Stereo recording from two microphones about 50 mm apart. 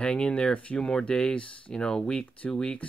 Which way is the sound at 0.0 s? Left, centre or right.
Left.